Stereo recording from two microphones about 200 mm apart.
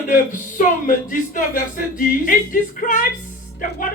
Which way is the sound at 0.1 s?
40° left (ahead or behind).